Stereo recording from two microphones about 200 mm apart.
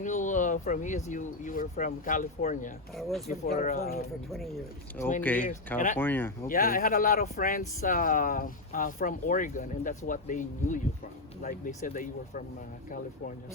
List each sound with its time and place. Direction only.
0.0 s speech: 40° left (ahead or behind)
3.0 s speech: centre (ahead or behind)
3.4 s speech: 45° left (ahead or behind)
4.3 s speech: centre (ahead or behind)
6.5 s speech: 45° left (ahead or behind)